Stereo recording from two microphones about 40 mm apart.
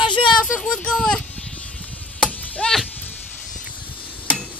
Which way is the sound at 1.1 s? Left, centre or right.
Left.